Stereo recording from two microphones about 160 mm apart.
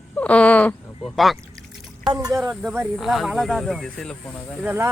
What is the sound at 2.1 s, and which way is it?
Speech, 25° right (ahead or behind).